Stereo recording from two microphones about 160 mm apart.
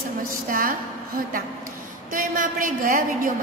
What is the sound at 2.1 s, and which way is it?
A woman's voice, 60° right (ahead or behind).